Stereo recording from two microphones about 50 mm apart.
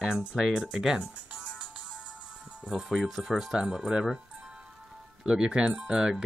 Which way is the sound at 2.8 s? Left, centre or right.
Centre.